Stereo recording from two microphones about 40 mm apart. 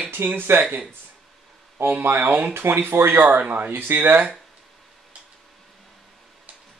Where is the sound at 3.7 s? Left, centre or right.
Right.